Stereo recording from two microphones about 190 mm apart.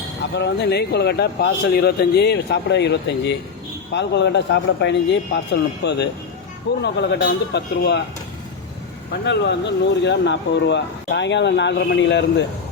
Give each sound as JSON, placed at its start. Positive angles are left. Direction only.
{"t": 0.3, "sound": "speech", "side_deg": 65}
{"t": 6.8, "sound": "speech", "side_deg": 65}
{"t": 9.2, "sound": "speech", "side_deg": 65}